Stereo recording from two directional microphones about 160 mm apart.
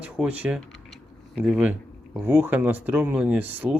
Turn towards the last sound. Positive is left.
turn(degrees=-10)  # may be behind; listen again after turning